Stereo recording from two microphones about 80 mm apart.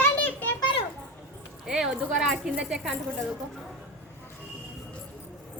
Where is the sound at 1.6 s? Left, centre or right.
Centre.